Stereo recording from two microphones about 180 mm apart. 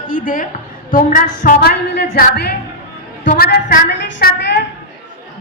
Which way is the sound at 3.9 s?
80° left.